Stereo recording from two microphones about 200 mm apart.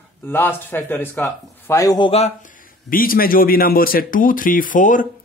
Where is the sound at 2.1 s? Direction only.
30° left (ahead or behind).